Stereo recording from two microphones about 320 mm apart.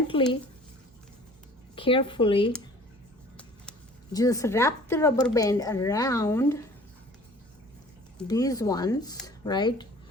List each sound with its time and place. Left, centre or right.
0.1 s speech: centre
1.7 s speech: centre
8.2 s speech: centre